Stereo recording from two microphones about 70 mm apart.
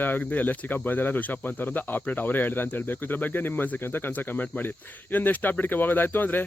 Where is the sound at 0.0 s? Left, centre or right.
Left.